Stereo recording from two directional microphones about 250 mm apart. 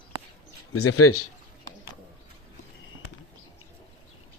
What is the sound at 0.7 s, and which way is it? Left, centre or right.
Speech, left.